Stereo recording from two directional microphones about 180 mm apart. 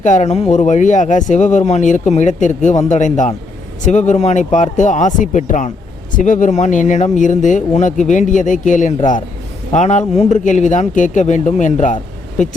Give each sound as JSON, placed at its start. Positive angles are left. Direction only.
{"t": 0.0, "sound": "speech", "side_deg": 40}